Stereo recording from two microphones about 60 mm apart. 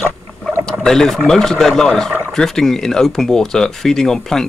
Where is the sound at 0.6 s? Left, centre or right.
Centre.